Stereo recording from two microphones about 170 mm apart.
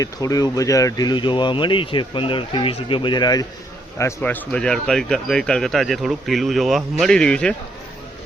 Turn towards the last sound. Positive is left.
turn(degrees=5)  # may be behind; listen again after turning